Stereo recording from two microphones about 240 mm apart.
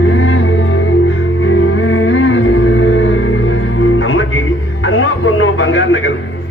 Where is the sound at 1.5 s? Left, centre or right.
Left.